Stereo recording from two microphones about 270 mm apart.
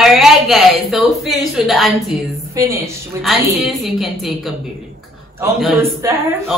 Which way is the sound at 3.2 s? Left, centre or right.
Centre.